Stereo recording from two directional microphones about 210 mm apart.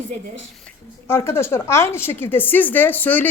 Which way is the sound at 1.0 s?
10° left (ahead or behind).